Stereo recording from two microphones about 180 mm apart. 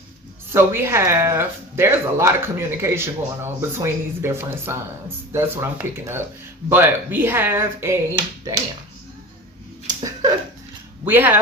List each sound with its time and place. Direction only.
0.5 s speech: 15° right (ahead or behind)
10.0 s a sound: 20° right (ahead or behind)
11.0 s speech: 10° right (ahead or behind)